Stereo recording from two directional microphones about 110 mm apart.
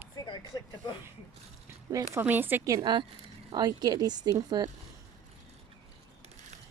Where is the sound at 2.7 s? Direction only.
40° right (ahead or behind).